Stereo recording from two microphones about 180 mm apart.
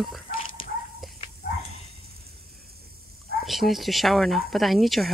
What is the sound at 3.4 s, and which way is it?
Speech, centre (ahead or behind).